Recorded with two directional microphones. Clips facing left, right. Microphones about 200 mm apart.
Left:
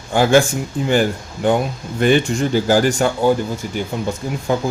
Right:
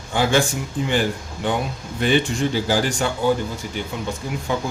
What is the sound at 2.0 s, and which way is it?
Speech, 50° left (ahead or behind).